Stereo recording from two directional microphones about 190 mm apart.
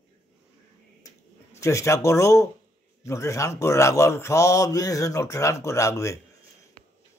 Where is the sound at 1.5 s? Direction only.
15° left (ahead or behind).